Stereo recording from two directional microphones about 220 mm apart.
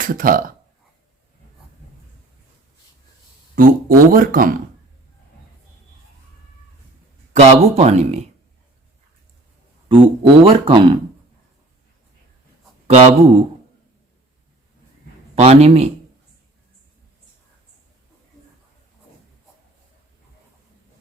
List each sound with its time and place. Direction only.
0.0 s speech: 40° right (ahead or behind)
3.5 s speech: 40° right (ahead or behind)
7.3 s speech: 30° right (ahead or behind)
9.9 s speech: 25° right (ahead or behind)
12.9 s speech: 30° right (ahead or behind)
15.4 s speech: 30° right (ahead or behind)